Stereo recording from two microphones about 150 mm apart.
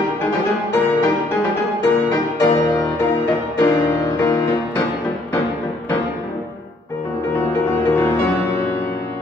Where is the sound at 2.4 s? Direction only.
20° left (ahead or behind).